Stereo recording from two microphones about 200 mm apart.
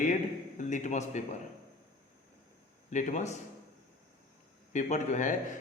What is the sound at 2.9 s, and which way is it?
Speech, 35° left (ahead or behind).